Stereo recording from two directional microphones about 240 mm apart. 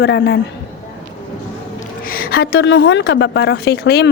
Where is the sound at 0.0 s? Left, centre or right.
Left.